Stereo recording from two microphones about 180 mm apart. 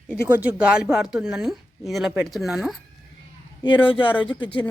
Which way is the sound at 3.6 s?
30° left (ahead or behind).